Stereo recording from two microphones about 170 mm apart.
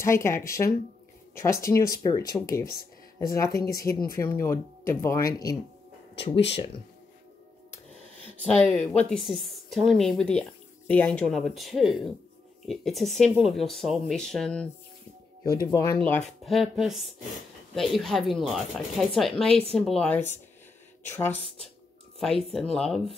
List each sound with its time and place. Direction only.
0.0 s speech: 15° left (ahead or behind)
8.5 s speech: 10° left (ahead or behind)
15.6 s speech: 20° left (ahead or behind)
16.0 s speech: 5° left (ahead or behind)
22.2 s speech: centre (ahead or behind)